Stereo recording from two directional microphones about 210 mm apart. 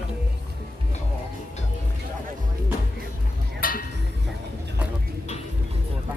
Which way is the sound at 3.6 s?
40° left (ahead or behind).